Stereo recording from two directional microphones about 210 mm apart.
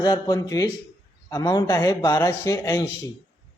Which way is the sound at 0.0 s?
20° left (ahead or behind).